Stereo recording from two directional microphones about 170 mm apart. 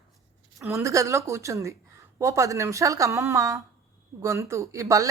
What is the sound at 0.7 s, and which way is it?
Speech, 20° right (ahead or behind).